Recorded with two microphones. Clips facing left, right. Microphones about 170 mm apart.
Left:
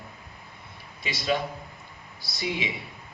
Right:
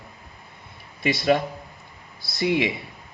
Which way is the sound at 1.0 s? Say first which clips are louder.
Right 7 dB; 60° right (ahead or behind).